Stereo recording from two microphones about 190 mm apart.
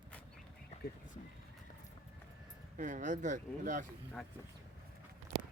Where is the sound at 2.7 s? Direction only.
40° right (ahead or behind).